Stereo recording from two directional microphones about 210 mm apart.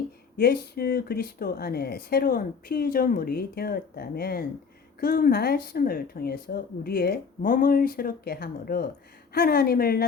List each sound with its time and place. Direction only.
0.3 s speech: 45° left (ahead or behind)